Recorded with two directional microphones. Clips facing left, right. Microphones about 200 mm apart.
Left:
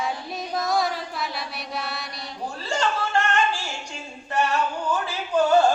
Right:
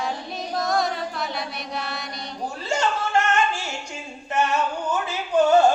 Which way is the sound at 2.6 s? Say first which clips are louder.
Right 1 dB; 20° right (ahead or behind).